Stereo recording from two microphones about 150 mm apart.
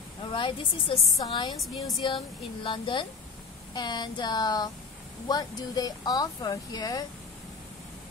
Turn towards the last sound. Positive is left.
turn(degrees=25)  # may be behind; listen again after turning